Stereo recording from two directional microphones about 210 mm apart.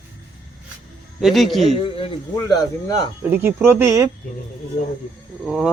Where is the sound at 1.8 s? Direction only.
25° left (ahead or behind).